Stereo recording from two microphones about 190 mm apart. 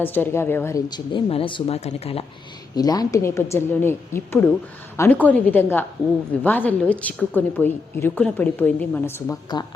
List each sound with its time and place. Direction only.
0.0 s a woman's voice: 10° left (ahead or behind); by 2.2 s 35° left (ahead or behind)
2.7 s a woman's voice: 20° left (ahead or behind)